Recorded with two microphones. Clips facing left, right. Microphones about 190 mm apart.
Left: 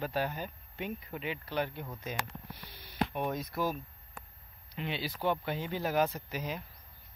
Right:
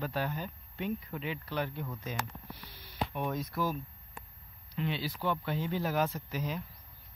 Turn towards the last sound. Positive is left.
turn(degrees=10)  # may be behind; listen again after turning